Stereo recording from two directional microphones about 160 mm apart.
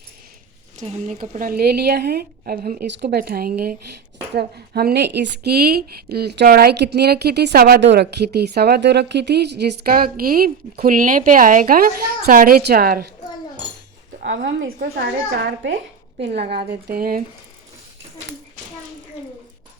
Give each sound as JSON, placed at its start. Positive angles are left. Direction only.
{"t": 0.8, "sound": "a woman's voice", "side_deg": -50}
{"t": 4.4, "sound": "a woman's voice", "side_deg": -90}
{"t": 14.2, "sound": "a woman's voice", "side_deg": -90}
{"t": 16.5, "sound": "a woman's voice", "side_deg": -75}